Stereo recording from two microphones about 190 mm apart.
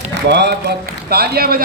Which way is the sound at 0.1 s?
65° right (ahead or behind).